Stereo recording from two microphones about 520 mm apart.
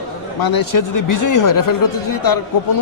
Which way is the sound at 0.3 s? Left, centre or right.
Left.